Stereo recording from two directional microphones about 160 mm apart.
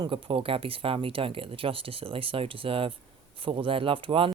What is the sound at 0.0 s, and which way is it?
Speech, 30° right (ahead or behind).